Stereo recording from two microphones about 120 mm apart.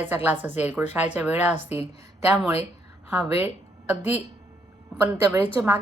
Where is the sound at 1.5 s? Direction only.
60° left (ahead or behind).